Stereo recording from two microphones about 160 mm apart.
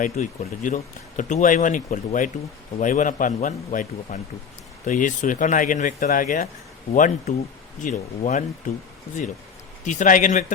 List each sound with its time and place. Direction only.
0.0 s speech: 55° left (ahead or behind)
9.8 s speech: 50° left (ahead or behind)